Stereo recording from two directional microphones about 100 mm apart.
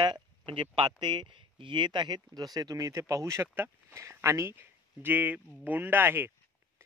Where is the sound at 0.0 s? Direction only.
50° right (ahead or behind).